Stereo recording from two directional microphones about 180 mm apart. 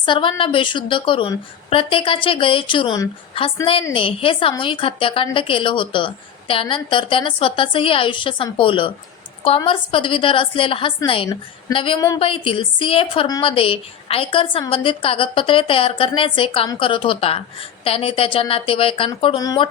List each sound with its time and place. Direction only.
0.0 s a woman's voice: 30° left (ahead or behind)
12.2 s a woman's voice: 30° left (ahead or behind)